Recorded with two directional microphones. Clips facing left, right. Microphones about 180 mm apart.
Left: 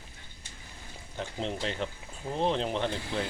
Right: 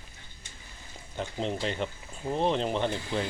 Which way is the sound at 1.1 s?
Centre (ahead or behind).